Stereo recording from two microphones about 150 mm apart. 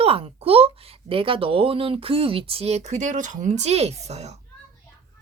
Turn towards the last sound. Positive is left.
turn(degrees=-45)  # may be behind; listen again after turning